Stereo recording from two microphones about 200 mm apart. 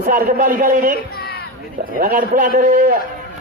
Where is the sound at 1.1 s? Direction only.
50° left (ahead or behind).